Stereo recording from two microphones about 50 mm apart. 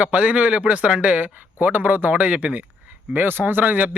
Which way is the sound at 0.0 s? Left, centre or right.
Right.